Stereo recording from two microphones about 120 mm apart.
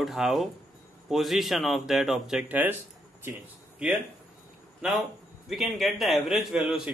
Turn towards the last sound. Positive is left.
turn(degrees=-5)  # may be behind; listen again after turning